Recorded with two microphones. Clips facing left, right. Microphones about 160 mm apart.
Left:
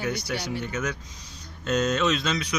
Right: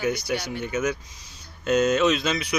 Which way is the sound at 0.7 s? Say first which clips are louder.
Right 5 dB; 10° right (ahead or behind).